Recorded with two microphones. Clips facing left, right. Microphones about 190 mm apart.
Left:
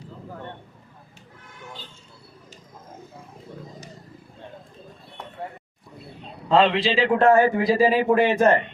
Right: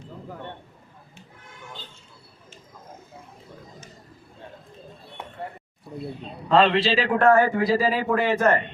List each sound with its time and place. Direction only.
6.5 s a man's voice: 10° left (ahead or behind)